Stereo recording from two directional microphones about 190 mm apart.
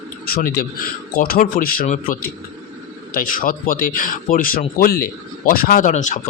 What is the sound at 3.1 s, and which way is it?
Speech, 45° left (ahead or behind).